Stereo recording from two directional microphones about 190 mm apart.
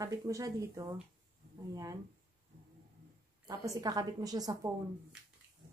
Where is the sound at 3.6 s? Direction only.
20° right (ahead or behind).